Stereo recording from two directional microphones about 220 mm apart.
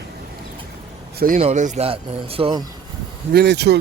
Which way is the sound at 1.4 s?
30° right (ahead or behind).